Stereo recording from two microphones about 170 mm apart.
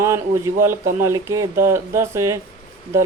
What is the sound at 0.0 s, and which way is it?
Speech, 15° right (ahead or behind).